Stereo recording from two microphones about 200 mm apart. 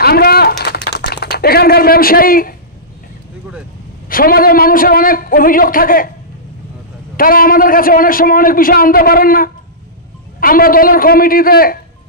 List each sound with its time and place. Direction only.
0.0 s a sound: 50° left (ahead or behind)
4.1 s a man's voice: 45° left (ahead or behind)
7.2 s a man's voice: 45° left (ahead or behind)